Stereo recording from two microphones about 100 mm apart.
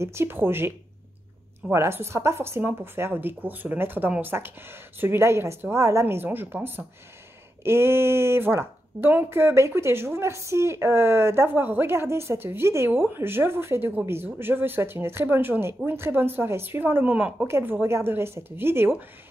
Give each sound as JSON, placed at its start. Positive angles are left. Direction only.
{"t": 0.0, "sound": "speech", "side_deg": -25}